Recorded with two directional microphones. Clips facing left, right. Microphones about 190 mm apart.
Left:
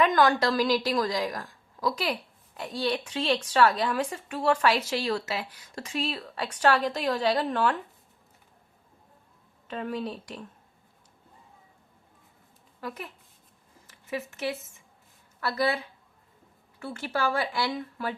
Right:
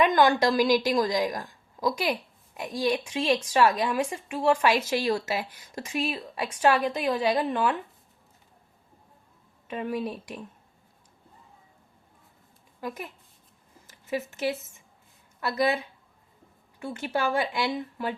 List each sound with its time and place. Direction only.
0.0 s a woman's voice: 15° right (ahead or behind)
9.6 s a woman's voice: 10° right (ahead or behind)
14.1 s speech: 30° right (ahead or behind)
15.4 s a woman's voice: 20° right (ahead or behind)
16.8 s speech: 20° right (ahead or behind)